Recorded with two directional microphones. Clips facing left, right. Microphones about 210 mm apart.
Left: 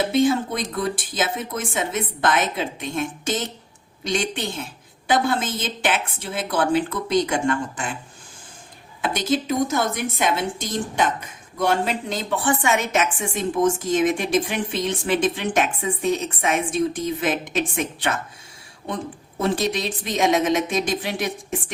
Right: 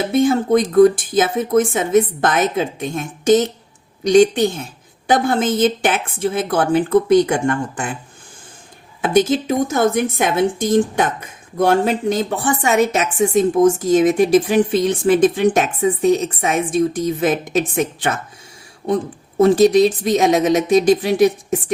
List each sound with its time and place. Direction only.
0.1 s a woman's voice: 50° right (ahead or behind)
9.0 s a woman's voice: 50° right (ahead or behind)
19.4 s speech: 45° right (ahead or behind)